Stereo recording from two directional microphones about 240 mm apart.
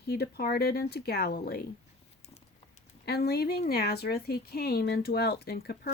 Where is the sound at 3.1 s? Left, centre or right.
Left.